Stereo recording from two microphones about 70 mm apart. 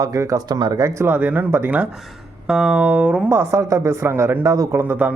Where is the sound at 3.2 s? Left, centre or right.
Right.